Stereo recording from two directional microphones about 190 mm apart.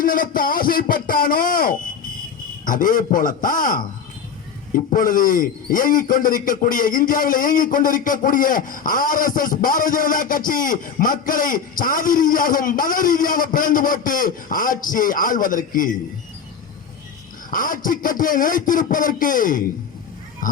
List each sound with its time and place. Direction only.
0.0 s a man's voice: 45° left (ahead or behind)
17.5 s a man's voice: 45° left (ahead or behind)